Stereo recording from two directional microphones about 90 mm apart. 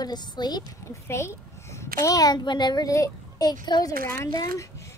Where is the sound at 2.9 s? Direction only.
45° left (ahead or behind).